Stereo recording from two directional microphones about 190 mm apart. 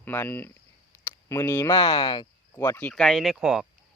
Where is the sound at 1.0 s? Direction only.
15° left (ahead or behind).